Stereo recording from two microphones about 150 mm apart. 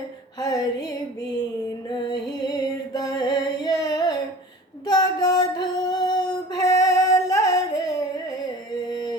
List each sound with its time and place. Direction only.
0.3 s music: 25° left (ahead or behind)
2.9 s a sound: 25° left (ahead or behind)
8.9 s music: 30° left (ahead or behind)